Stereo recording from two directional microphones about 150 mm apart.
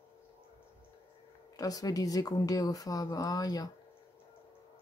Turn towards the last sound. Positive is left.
turn(degrees=25)  # may be behind; listen again after turning